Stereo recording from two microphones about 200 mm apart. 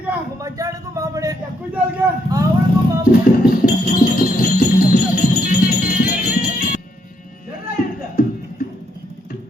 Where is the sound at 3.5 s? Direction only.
45° left (ahead or behind).